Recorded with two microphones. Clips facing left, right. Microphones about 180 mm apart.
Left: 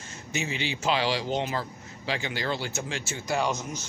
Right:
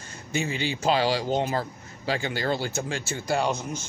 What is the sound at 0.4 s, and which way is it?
Speech, 45° right (ahead or behind).